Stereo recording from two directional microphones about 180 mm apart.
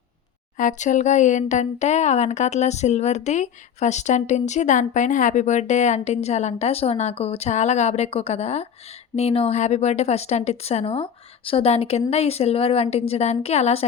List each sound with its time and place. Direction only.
0.5 s speech: 45° left (ahead or behind)